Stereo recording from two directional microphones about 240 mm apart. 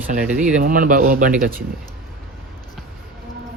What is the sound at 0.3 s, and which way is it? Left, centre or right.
Speech, centre.